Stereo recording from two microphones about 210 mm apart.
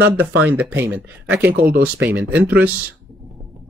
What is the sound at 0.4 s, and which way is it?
Speech, 5° right (ahead or behind).